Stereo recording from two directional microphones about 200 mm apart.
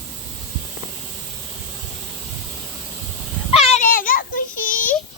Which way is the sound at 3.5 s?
30° left (ahead or behind).